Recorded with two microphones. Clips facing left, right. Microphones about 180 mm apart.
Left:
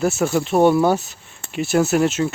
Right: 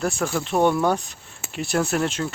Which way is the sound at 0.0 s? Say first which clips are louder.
Left 6 dB; 5° left (ahead or behind).